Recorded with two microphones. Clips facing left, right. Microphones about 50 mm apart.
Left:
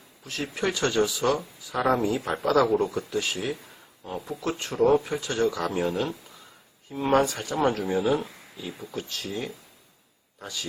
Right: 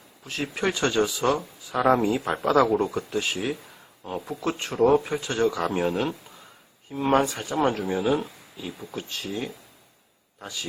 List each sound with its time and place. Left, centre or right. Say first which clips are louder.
0.5 s speech: right 1 dB; right